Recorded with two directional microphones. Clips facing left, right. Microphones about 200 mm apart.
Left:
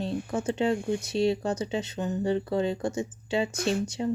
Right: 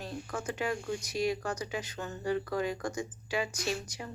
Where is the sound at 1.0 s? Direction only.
25° left (ahead or behind).